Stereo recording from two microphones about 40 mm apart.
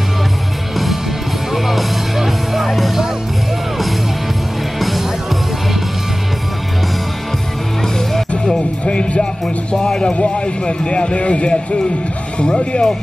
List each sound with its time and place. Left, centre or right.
1.5 s music: centre
4.7 s music: centre
8.5 s music: left
9.8 s a man's voice: centre
10.1 s speech: left